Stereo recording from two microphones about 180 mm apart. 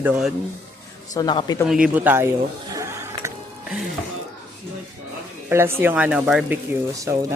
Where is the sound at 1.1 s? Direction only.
25° left (ahead or behind).